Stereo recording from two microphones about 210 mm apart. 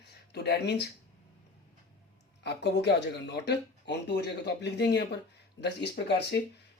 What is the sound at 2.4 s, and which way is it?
Speech, 55° left (ahead or behind).